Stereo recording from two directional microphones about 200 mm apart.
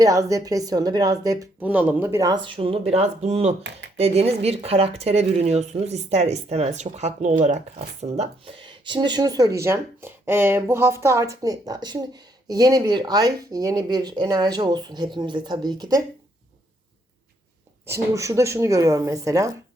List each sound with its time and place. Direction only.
0.0 s speech: 15° right (ahead or behind)
17.8 s speech: 15° right (ahead or behind)